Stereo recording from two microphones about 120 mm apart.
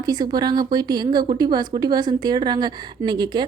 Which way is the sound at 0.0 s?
35° right (ahead or behind).